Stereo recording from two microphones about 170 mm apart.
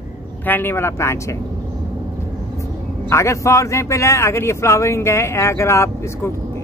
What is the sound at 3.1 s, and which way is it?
A man's voice, 15° left (ahead or behind).